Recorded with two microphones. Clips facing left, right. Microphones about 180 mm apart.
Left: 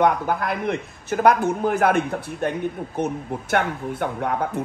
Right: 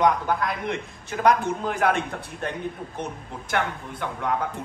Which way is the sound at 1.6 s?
55° left (ahead or behind).